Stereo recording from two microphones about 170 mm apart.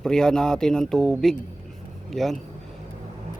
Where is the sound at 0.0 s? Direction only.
5° left (ahead or behind).